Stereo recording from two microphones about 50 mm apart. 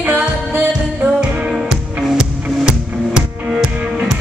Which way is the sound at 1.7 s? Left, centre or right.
Centre.